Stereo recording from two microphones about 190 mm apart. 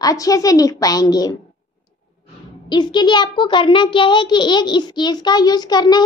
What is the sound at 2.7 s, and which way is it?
A child's voice, 25° left (ahead or behind).